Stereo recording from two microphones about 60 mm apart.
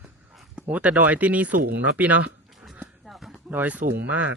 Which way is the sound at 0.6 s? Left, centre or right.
Right.